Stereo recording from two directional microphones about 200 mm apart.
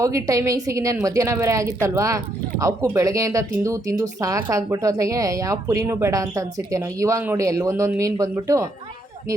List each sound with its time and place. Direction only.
0.0 s a woman's voice: 15° right (ahead or behind)